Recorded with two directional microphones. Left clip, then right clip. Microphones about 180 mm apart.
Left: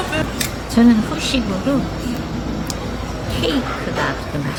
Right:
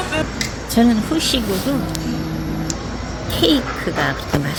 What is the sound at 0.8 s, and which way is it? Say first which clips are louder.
Speech: left 1 dB; 25° right (ahead or behind).